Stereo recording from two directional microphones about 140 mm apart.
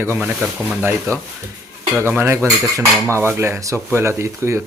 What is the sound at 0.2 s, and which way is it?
Speech, 5° right (ahead or behind).